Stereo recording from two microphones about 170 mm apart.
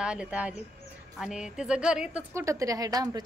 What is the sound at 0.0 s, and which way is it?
A woman's voice, 5° right (ahead or behind).